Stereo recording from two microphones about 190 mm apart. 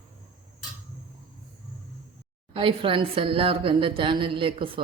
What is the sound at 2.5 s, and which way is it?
A woman's voice, 25° right (ahead or behind).